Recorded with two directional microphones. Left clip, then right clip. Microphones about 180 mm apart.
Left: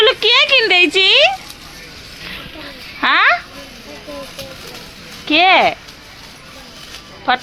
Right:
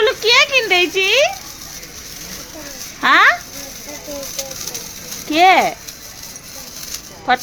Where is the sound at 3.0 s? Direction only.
10° left (ahead or behind).